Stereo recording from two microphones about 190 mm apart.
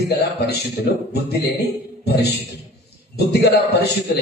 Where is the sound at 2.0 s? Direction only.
60° left (ahead or behind).